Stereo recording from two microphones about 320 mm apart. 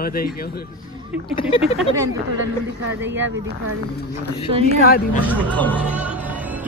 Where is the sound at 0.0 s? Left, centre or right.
Left.